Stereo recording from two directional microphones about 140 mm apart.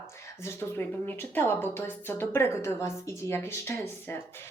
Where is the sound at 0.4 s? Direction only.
15° left (ahead or behind).